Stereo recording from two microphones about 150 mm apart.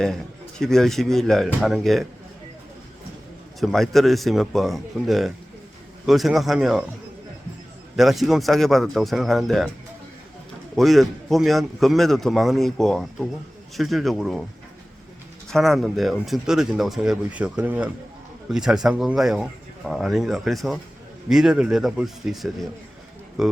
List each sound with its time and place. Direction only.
0.6 s a man's voice: 5° left (ahead or behind)
3.6 s a man's voice: centre (ahead or behind)
7.9 s a man's voice: centre (ahead or behind)
10.8 s a man's voice: centre (ahead or behind)
15.4 s a man's voice: centre (ahead or behind)